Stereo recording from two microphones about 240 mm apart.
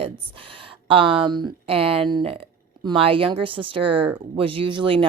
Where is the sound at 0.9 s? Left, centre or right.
Right.